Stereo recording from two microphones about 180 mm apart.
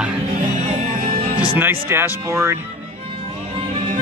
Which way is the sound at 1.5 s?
10° right (ahead or behind).